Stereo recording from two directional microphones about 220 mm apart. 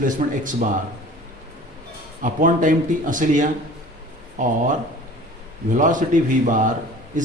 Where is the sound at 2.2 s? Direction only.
35° right (ahead or behind).